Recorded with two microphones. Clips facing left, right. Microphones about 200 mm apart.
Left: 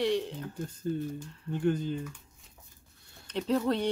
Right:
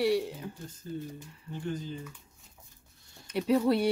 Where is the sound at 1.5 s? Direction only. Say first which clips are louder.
Left 7 dB; 60° left (ahead or behind).